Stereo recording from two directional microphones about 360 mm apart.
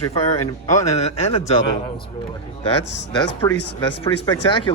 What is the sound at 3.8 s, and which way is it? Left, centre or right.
Speech, centre.